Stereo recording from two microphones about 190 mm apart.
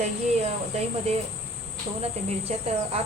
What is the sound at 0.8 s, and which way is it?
Speech, 30° right (ahead or behind).